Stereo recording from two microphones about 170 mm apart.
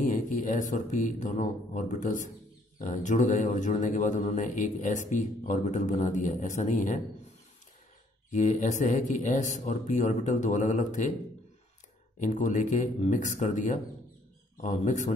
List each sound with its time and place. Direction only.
0.4 s speech: 50° left (ahead or behind)
8.3 s speech: 45° left (ahead or behind)
12.2 s speech: 45° left (ahead or behind)